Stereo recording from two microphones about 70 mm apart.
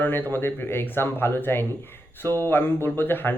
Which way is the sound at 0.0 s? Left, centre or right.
Left.